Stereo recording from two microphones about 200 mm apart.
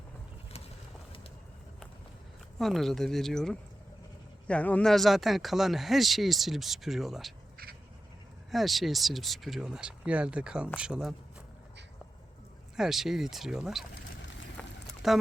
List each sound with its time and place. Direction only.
2.6 s speech: centre (ahead or behind)
8.4 s speech: centre (ahead or behind)
12.7 s speech: centre (ahead or behind)
13.9 s boat: 65° left (ahead or behind)
15.0 s speech: centre (ahead or behind)